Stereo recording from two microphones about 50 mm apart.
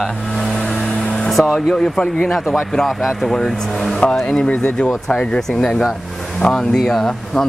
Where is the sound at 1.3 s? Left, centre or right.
Centre.